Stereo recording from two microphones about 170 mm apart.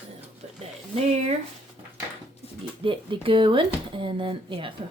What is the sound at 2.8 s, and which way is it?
Speech, 30° right (ahead or behind).